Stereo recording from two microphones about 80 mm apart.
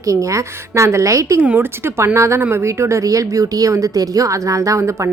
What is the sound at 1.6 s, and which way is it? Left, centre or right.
Speech, right.